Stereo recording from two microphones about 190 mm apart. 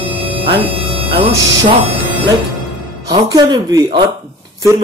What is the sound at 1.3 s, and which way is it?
Speech, 15° right (ahead or behind).